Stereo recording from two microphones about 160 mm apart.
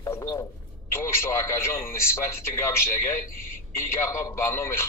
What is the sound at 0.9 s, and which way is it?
A man's voice, 15° left (ahead or behind).